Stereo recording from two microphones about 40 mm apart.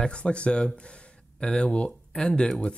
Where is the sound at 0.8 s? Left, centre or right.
Left.